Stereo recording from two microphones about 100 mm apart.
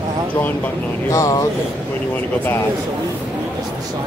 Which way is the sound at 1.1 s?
35° left (ahead or behind).